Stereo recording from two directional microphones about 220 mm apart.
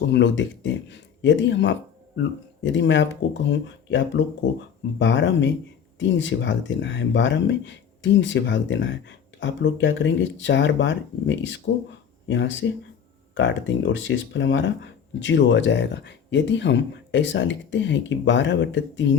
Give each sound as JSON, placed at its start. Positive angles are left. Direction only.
{"t": 0.0, "sound": "speech", "side_deg": 55}